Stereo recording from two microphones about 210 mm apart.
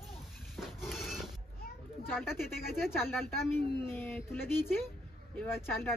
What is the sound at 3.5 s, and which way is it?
Speech, 10° left (ahead or behind).